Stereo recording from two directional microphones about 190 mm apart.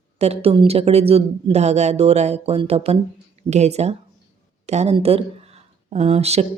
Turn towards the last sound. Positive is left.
turn(degrees=-35)  # may be behind; listen again after turning